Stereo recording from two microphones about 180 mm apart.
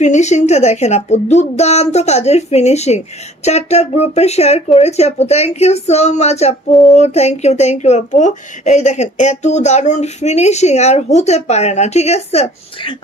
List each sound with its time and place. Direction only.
0.0 s speech: 40° left (ahead or behind)